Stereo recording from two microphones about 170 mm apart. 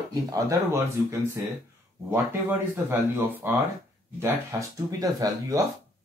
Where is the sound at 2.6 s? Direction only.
15° right (ahead or behind).